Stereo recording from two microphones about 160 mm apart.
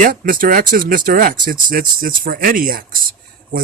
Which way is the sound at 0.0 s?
60° right (ahead or behind).